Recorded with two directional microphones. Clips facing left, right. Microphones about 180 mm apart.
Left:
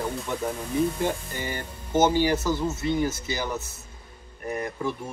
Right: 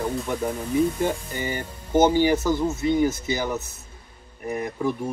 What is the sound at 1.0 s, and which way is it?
Speech, 10° right (ahead or behind).